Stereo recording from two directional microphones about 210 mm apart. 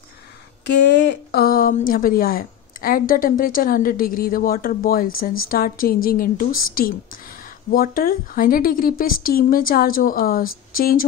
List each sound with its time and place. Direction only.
0.7 s a woman's voice: 55° left (ahead or behind)